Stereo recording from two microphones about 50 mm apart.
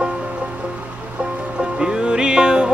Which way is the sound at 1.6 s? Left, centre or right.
Centre.